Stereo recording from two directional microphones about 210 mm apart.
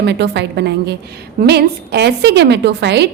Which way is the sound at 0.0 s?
55° right (ahead or behind).